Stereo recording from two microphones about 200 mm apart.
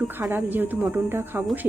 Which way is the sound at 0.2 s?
10° right (ahead or behind).